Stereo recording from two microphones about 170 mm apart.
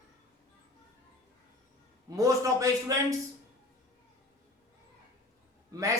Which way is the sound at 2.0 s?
20° right (ahead or behind).